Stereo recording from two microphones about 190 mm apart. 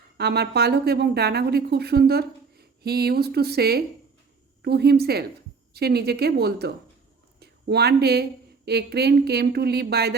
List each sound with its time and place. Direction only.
0.2 s a woman's voice: 60° right (ahead or behind)